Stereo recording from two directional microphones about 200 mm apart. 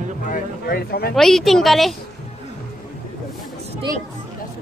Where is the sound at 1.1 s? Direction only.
Centre (ahead or behind).